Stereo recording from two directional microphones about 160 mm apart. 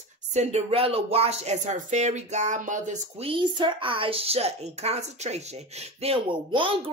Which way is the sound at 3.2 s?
30° right (ahead or behind).